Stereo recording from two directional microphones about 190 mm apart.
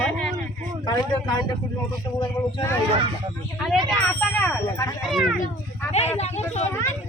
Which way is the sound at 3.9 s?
5° left (ahead or behind).